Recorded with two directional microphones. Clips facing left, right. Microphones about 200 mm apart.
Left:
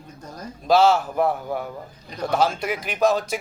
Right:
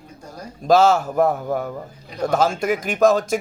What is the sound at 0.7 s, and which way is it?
Speech, 45° right (ahead or behind).